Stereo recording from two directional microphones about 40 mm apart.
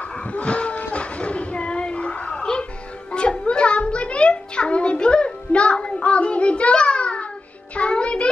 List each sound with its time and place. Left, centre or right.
0.3 s a sound: left
3.1 s music: left
7.9 s child singing: left